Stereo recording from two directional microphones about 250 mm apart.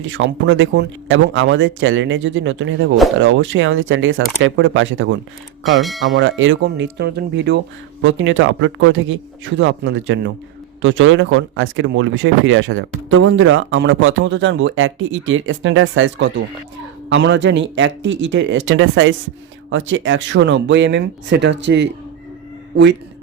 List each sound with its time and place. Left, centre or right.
0.0 s speech: right